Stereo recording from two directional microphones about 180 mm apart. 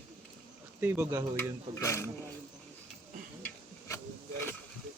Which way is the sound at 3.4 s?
15° left (ahead or behind).